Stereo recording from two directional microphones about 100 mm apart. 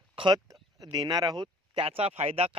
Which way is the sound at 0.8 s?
40° right (ahead or behind).